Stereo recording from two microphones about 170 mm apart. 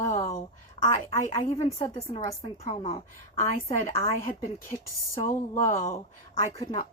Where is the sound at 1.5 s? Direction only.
40° left (ahead or behind).